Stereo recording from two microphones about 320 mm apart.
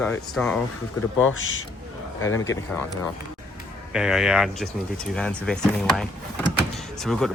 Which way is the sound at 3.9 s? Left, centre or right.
Centre.